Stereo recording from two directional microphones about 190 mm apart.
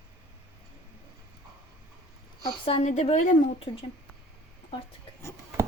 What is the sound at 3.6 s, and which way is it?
Speech, 30° left (ahead or behind).